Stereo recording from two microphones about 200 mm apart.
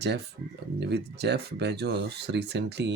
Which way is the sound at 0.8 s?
55° right (ahead or behind).